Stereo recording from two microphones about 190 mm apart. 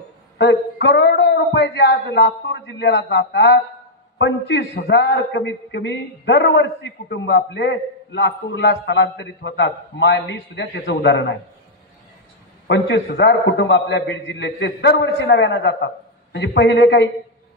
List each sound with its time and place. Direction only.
0.4 s a man's voice: 65° left (ahead or behind)
12.6 s a man's voice: 70° left (ahead or behind)